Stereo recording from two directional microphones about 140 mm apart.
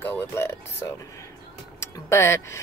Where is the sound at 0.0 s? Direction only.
15° left (ahead or behind).